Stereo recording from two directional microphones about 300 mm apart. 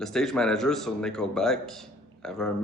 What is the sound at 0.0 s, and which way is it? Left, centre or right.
Speech, centre.